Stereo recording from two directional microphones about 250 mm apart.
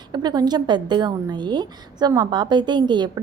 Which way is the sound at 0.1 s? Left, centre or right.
Centre.